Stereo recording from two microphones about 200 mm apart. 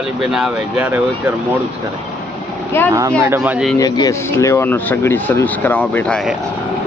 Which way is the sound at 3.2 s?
10° right (ahead or behind).